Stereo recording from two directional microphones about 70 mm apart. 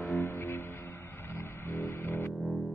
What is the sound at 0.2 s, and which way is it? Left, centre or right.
Music, left.